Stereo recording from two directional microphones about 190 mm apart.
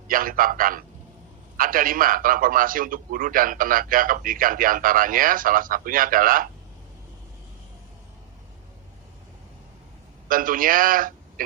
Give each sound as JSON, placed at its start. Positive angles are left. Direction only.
{"t": 0.1, "sound": "a man's voice", "side_deg": -45}
{"t": 10.2, "sound": "a man's voice", "side_deg": -45}